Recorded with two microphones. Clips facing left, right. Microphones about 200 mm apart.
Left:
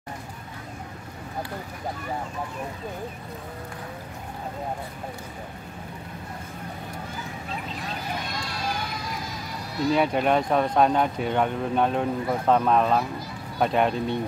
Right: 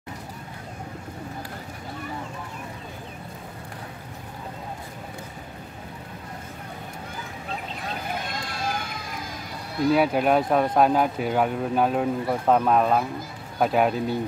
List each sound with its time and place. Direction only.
8.3 s run: 50° right (ahead or behind)
9.9 s speech: 5° right (ahead or behind)